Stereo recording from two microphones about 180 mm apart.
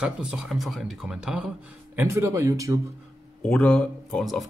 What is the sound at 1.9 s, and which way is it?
Speech, 15° right (ahead or behind).